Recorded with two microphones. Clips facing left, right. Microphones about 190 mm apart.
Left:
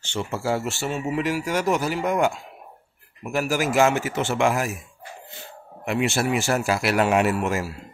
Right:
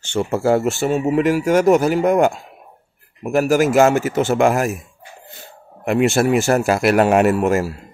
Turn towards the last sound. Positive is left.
turn(degrees=-45)  # may be behind; listen again after turning